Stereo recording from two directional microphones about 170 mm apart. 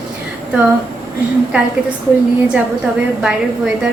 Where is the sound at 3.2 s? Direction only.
5° right (ahead or behind).